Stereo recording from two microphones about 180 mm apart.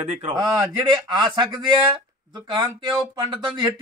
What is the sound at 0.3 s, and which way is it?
A man's voice, 20° right (ahead or behind).